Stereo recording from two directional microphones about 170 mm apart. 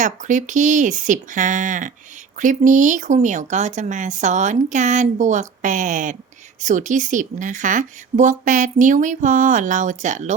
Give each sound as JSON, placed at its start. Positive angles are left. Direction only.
{"t": 0.0, "sound": "speech", "side_deg": -45}